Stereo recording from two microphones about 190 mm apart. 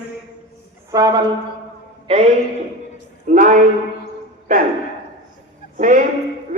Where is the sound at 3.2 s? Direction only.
40° right (ahead or behind).